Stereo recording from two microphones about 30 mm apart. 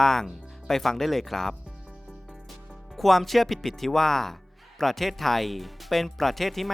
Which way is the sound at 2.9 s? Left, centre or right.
Centre.